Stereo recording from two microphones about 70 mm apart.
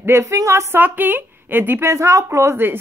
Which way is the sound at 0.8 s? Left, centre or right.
Right.